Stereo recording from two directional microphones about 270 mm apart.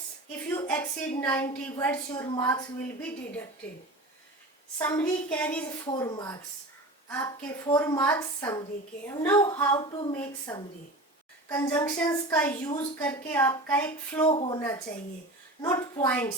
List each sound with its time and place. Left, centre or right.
0.3 s a woman's voice: centre
4.8 s a woman's voice: centre
14.3 s a woman's voice: centre
15.6 s a woman's voice: centre